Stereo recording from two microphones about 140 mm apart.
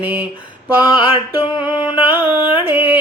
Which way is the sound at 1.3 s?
10° right (ahead or behind).